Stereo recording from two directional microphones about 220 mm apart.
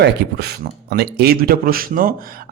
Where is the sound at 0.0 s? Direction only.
50° right (ahead or behind).